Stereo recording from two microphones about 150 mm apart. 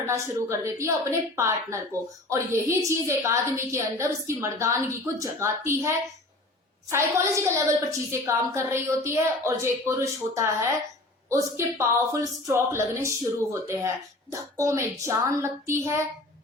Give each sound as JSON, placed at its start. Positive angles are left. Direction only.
{"t": 0.0, "sound": "a woman's voice", "side_deg": -20}